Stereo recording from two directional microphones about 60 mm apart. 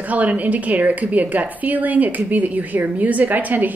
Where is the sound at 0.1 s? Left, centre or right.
Right.